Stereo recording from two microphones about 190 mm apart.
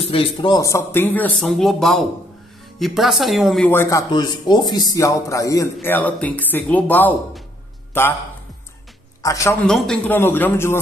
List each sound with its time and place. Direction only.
0.1 s a man's voice: 25° left (ahead or behind); by 3.7 s centre (ahead or behind)
3.7 s a man's voice: 15° left (ahead or behind)
9.2 s a man's voice: 15° left (ahead or behind)
9.7 s a man's voice: 5° left (ahead or behind)